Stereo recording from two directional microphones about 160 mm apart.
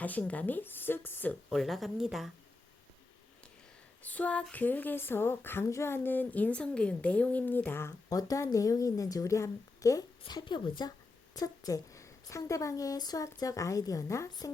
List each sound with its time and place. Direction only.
0.0 s speech: 10° left (ahead or behind)
1.5 s a woman's voice: centre (ahead or behind)
4.0 s a woman's voice: 10° left (ahead or behind)